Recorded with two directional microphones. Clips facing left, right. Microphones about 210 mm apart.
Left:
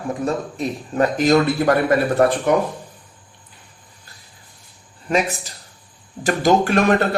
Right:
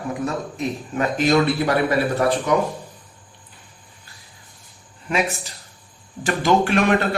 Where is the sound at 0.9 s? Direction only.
40° left (ahead or behind).